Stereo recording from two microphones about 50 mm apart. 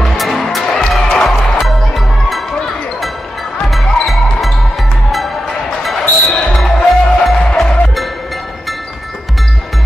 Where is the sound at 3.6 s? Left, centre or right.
Centre.